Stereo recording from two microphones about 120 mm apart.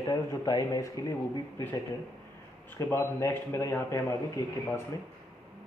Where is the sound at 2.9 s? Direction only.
20° left (ahead or behind).